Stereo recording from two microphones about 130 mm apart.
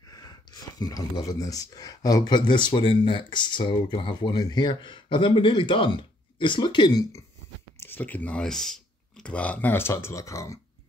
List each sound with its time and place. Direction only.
0.1 s speech: 30° left (ahead or behind)
7.8 s speech: 15° left (ahead or behind)